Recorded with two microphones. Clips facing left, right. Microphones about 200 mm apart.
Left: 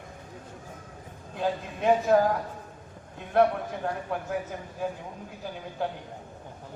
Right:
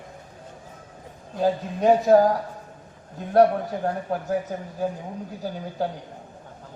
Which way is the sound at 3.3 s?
40° right (ahead or behind).